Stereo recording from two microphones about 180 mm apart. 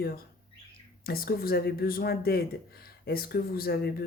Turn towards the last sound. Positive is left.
turn(degrees=55)  # may be behind; listen again after turning